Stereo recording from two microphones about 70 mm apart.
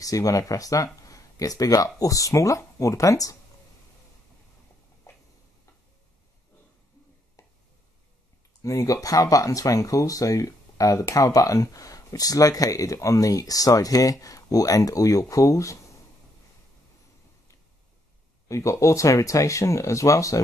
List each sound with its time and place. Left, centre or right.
0.0 s speech: left
5.1 s a sound: left
8.6 s speech: left
18.5 s speech: left